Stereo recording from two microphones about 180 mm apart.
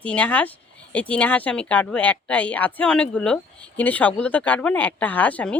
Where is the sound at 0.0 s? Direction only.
10° left (ahead or behind).